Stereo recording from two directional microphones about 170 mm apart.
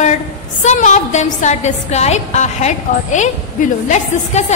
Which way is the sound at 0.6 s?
45° left (ahead or behind).